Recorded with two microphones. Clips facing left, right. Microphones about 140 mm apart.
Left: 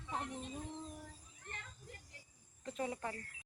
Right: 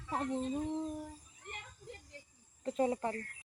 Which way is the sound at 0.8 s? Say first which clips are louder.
Right 10 dB; 15° right (ahead or behind).